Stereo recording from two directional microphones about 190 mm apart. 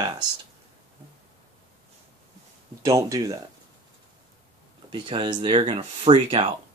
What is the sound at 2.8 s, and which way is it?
Speech, 15° right (ahead or behind).